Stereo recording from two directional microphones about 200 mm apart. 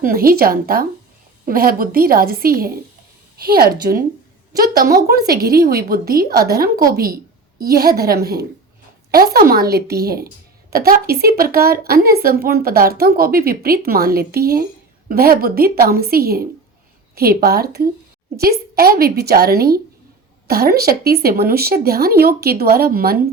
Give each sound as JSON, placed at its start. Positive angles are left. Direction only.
{"t": 0.0, "sound": "a woman's voice", "side_deg": -45}